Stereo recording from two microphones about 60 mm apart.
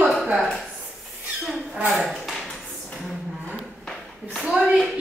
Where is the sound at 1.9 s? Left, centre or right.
Centre.